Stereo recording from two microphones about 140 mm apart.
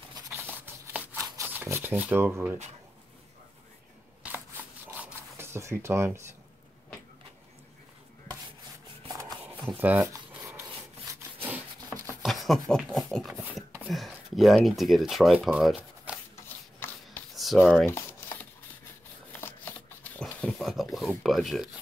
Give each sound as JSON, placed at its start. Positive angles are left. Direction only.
{"t": 1.5, "sound": "speech", "side_deg": -15}
{"t": 4.8, "sound": "zipper", "side_deg": -15}
{"t": 9.4, "sound": "rub", "side_deg": -10}
{"t": 11.1, "sound": "wood", "side_deg": -25}
{"t": 12.2, "sound": "speech", "side_deg": 0}
{"t": 16.8, "sound": "a sound", "side_deg": 15}
{"t": 17.4, "sound": "speech", "side_deg": 0}
{"t": 19.4, "sound": "a sound", "side_deg": 10}
{"t": 20.3, "sound": "speech", "side_deg": 5}